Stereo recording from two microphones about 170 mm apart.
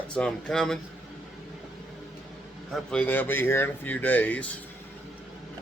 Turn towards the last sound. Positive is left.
turn(degrees=10)  # may be behind; listen again after turning